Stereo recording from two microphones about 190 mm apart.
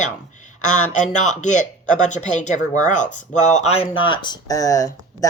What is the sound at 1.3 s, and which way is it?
Speech, 40° left (ahead or behind).